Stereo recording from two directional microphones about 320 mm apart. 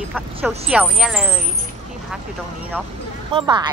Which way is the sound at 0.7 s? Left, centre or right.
Centre.